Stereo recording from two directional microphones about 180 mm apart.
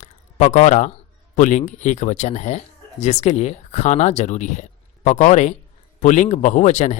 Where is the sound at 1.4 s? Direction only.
40° left (ahead or behind).